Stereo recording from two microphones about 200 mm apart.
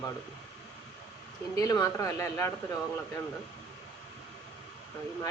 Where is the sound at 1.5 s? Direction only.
15° left (ahead or behind).